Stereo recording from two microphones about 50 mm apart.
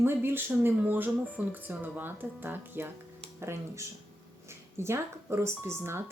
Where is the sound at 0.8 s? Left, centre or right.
Right.